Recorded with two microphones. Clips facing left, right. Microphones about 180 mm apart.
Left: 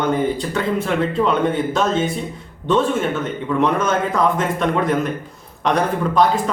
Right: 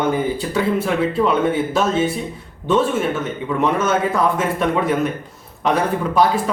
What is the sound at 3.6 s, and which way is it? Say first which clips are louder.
A man's voice: right 1 dB; 5° right (ahead or behind).